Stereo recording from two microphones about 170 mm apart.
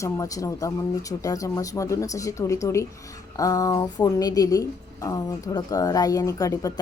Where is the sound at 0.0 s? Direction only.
20° left (ahead or behind).